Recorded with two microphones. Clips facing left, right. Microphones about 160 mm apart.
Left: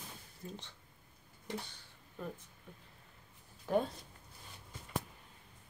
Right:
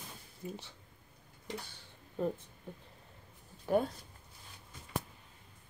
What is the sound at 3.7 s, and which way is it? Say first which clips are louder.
Speech: right 2 dB; 15° right (ahead or behind).